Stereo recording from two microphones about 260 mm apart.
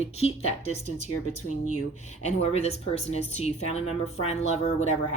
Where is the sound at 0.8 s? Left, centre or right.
Left.